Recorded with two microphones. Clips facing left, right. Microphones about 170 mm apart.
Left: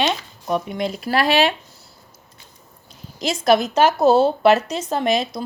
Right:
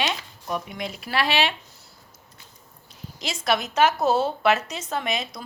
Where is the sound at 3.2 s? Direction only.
40° left (ahead or behind).